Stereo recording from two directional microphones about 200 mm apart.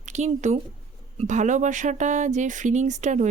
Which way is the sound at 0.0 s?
35° right (ahead or behind).